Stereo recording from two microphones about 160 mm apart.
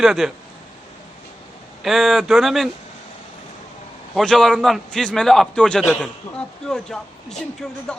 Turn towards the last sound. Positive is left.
turn(degrees=5)  # may be behind; listen again after turning